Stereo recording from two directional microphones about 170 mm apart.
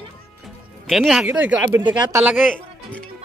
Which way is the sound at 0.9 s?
Centre (ahead or behind).